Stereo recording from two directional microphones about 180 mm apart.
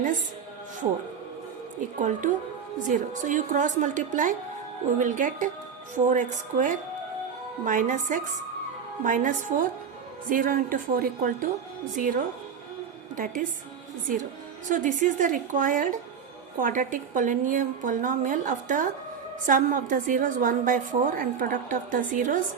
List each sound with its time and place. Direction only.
2.0 s a woman's voice: 45° right (ahead or behind)
14.7 s a woman's voice: 45° right (ahead or behind)